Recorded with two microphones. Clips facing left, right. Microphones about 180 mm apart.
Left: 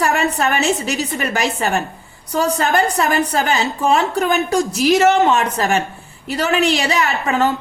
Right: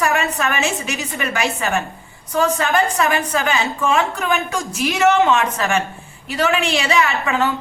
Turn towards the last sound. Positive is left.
turn(degrees=40)  # may be behind; listen again after turning